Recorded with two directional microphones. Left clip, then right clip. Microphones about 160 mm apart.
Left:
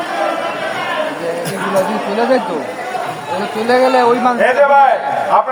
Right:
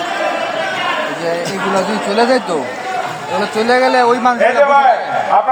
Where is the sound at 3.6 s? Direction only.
55° right (ahead or behind).